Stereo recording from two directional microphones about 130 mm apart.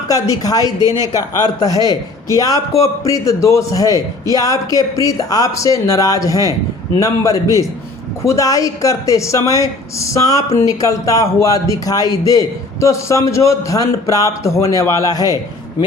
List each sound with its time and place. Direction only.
0.1 s speech: 25° left (ahead or behind)